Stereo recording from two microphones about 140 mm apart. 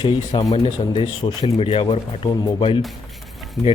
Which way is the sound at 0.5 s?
35° left (ahead or behind).